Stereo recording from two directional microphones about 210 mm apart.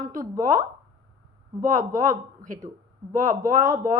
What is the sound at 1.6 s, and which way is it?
A woman's voice, 40° right (ahead or behind).